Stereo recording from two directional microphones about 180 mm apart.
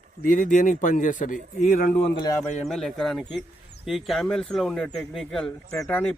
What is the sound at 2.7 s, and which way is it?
Speech, centre (ahead or behind).